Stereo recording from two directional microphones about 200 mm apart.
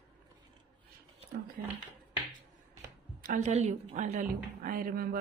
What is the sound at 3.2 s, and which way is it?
A woman's voice, 40° right (ahead or behind).